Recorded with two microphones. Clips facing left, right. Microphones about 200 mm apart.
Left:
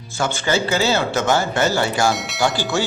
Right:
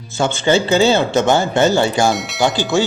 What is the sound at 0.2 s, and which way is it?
Speech, 25° right (ahead or behind).